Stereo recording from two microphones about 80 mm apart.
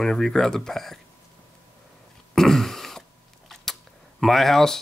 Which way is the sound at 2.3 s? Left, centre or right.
Centre.